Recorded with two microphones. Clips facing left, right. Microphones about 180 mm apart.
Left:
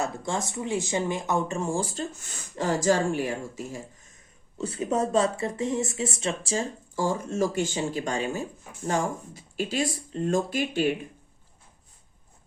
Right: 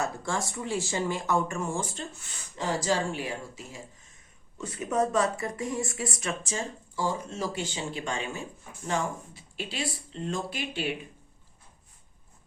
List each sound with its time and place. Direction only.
0.0 s speech: 20° left (ahead or behind); by 3.8 s 45° left (ahead or behind)
4.5 s speech: 30° left (ahead or behind)